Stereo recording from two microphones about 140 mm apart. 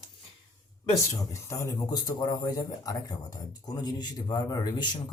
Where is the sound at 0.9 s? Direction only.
20° left (ahead or behind).